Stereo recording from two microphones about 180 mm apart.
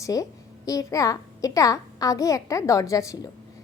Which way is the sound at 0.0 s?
20° left (ahead or behind).